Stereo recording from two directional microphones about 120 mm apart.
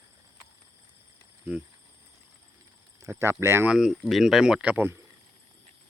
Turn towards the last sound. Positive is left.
turn(degrees=-15)  # may be behind; listen again after turning